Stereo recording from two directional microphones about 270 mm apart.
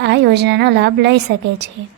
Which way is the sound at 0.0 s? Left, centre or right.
Right.